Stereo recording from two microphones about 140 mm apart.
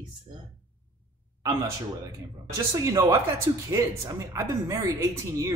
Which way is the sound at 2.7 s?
25° right (ahead or behind).